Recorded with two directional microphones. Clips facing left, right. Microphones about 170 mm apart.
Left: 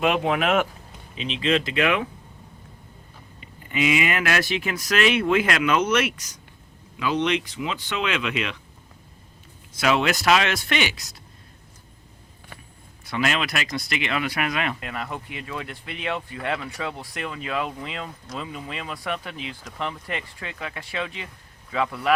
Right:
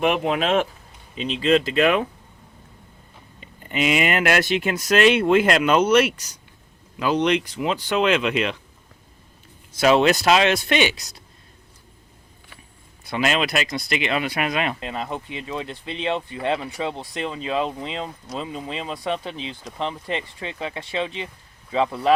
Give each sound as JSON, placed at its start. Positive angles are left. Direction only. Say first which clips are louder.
{"t": 0.3, "sound": "speech", "louder": "right 1 dB", "side_deg": -25}
{"t": 1.4, "sound": "speech", "louder": "right 4 dB", "side_deg": -40}
{"t": 4.2, "sound": "speech", "louder": "right 4 dB", "side_deg": -25}
{"t": 9.8, "sound": "speech", "louder": "right 5 dB", "side_deg": -30}
{"t": 13.1, "sound": "speech", "louder": "right 3 dB", "side_deg": -25}